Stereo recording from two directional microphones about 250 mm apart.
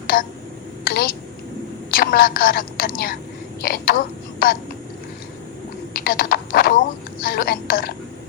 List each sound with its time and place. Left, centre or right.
0.1 s a woman's voice: left
5.9 s a sound: left
7.2 s a woman's voice: left